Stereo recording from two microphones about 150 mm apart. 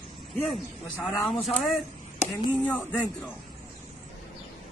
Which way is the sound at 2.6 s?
10° left (ahead or behind).